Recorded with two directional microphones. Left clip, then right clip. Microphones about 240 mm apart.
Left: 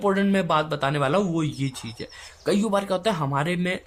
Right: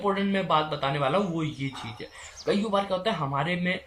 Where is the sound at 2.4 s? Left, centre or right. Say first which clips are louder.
Left 2 dB; left.